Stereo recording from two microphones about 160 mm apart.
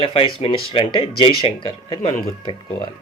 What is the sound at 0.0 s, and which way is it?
Speech, 35° left (ahead or behind).